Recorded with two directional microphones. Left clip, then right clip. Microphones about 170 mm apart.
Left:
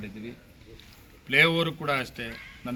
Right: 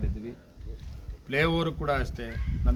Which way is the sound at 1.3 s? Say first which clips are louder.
Left 5 dB; 10° right (ahead or behind).